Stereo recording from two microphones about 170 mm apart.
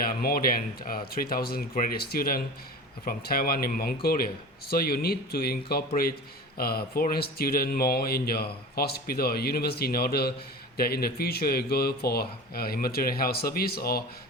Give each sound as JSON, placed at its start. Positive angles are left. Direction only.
{"t": 0.0, "sound": "speech", "side_deg": 60}